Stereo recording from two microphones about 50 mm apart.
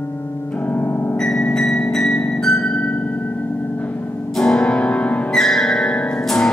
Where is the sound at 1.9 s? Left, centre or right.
Centre.